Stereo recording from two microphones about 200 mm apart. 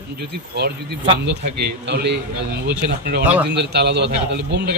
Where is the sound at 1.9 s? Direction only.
55° right (ahead or behind).